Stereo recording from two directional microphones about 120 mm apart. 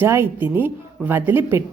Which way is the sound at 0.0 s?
20° right (ahead or behind).